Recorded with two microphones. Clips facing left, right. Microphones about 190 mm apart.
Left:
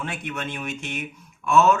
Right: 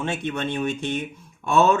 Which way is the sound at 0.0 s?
25° right (ahead or behind).